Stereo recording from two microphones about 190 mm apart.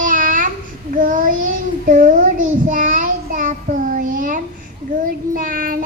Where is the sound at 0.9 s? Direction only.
45° right (ahead or behind).